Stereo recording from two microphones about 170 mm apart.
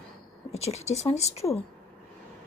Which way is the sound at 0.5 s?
40° left (ahead or behind).